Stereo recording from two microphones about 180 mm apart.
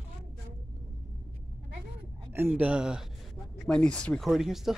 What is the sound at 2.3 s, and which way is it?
Speech, 10° right (ahead or behind).